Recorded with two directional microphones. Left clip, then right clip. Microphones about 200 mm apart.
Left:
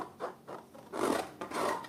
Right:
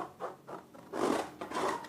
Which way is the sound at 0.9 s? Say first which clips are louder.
Even; 15° left (ahead or behind).